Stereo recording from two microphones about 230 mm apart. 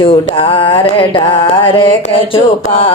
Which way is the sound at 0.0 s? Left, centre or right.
Left.